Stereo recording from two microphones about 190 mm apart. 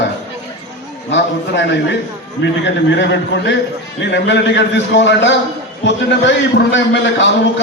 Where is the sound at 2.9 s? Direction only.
65° left (ahead or behind).